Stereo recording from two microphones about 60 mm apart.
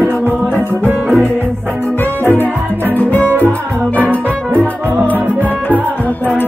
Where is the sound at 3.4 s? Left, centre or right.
Right.